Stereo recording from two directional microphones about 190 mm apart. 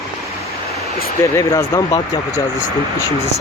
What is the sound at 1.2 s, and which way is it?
Speech, 15° left (ahead or behind).